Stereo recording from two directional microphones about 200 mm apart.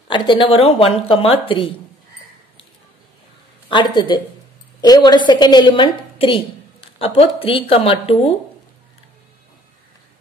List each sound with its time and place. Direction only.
0.1 s a woman's voice: 25° left (ahead or behind)
3.6 s a woman's voice: 25° left (ahead or behind)